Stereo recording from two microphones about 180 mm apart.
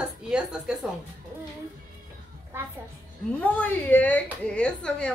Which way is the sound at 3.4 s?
10° left (ahead or behind).